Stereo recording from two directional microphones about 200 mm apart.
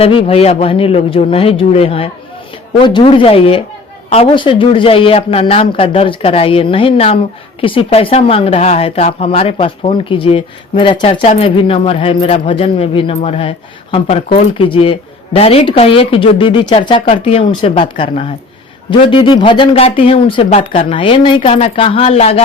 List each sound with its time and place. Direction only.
0.0 s speech: 30° left (ahead or behind)